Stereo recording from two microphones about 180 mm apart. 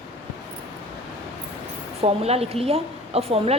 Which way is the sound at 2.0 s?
35° right (ahead or behind).